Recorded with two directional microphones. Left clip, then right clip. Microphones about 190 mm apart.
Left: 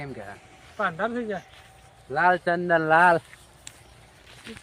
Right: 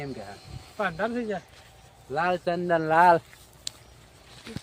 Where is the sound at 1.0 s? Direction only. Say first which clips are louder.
Left 1 dB; 10° right (ahead or behind).